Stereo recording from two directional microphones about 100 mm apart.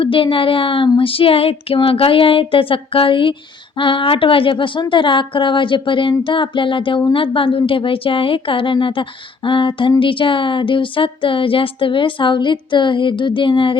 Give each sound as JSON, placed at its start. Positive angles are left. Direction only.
{"t": 0.0, "sound": "speech", "side_deg": 60}